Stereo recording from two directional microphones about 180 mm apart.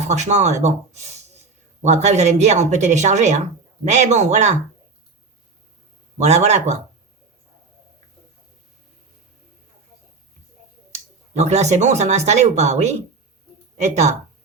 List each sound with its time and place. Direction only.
0.1 s speech: 40° right (ahead or behind)
1.8 s speech: 40° right (ahead or behind)
6.1 s speech: 40° right (ahead or behind)
11.3 s speech: 40° right (ahead or behind)